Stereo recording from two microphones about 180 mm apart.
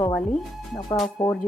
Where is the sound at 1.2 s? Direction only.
25° left (ahead or behind).